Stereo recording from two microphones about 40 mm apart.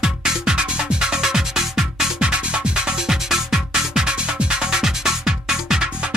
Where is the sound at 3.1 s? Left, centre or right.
Centre.